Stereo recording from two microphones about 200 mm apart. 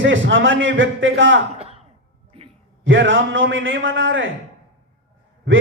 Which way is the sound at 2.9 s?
70° right (ahead or behind).